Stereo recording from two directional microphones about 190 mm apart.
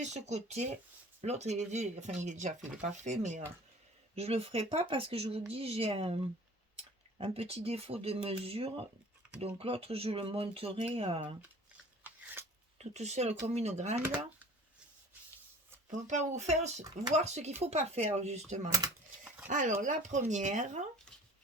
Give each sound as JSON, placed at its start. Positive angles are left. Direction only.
{"t": 0.0, "sound": "speech", "side_deg": -35}
{"t": 12.0, "sound": "shuffling cards", "side_deg": -10}
{"t": 12.8, "sound": "speech", "side_deg": -35}
{"t": 15.9, "sound": "speech", "side_deg": -40}